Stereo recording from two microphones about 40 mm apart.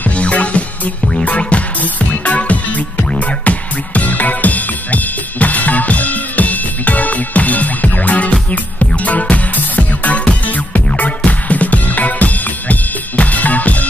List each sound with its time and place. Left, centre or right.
0.1 s music: left